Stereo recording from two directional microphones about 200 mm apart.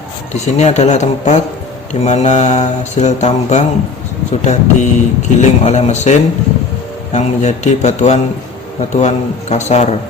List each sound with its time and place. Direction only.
0.3 s speech: 35° left (ahead or behind)